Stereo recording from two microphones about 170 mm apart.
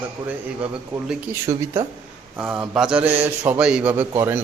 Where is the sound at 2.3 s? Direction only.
5° right (ahead or behind).